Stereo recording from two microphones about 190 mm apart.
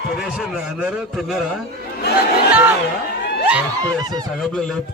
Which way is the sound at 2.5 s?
10° right (ahead or behind).